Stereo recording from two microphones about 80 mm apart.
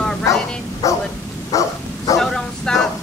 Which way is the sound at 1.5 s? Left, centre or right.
Left.